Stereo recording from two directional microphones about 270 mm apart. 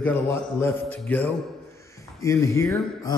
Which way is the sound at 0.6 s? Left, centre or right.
Centre.